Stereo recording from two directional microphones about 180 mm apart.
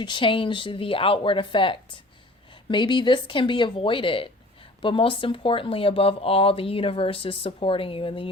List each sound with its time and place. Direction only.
0.0 s speech: 25° left (ahead or behind)